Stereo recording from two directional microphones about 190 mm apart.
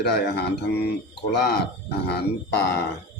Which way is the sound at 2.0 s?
60° left (ahead or behind).